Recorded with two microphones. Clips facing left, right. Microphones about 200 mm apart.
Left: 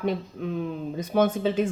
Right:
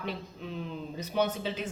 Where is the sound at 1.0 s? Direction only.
50° left (ahead or behind).